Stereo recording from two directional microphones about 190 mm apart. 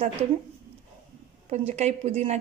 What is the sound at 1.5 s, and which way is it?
Speech, 35° right (ahead or behind).